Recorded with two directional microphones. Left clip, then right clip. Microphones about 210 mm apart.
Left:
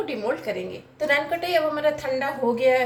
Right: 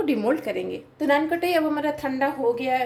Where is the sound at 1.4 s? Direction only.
45° right (ahead or behind).